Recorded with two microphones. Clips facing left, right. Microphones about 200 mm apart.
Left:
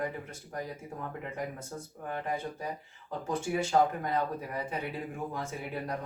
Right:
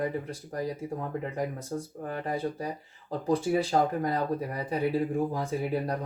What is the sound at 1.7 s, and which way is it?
Speech, 30° right (ahead or behind).